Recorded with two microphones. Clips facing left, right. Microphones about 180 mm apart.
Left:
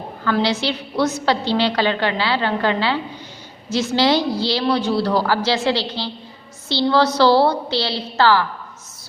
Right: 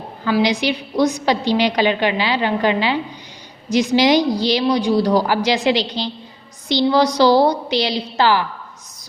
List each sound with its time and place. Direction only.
0.3 s a woman's voice: 15° right (ahead or behind)